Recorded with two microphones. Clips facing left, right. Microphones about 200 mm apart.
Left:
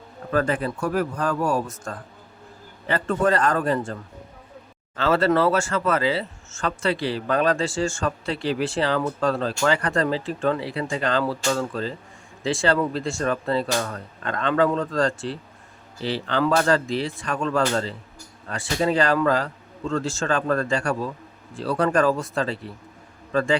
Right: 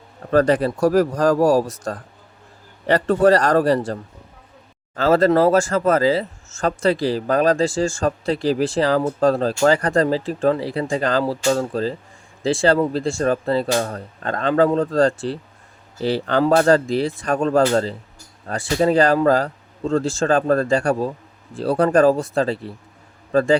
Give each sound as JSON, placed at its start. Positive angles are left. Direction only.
{"t": 0.3, "sound": "speech", "side_deg": -35}
{"t": 2.8, "sound": "speech", "side_deg": -35}
{"t": 4.9, "sound": "speech", "side_deg": -40}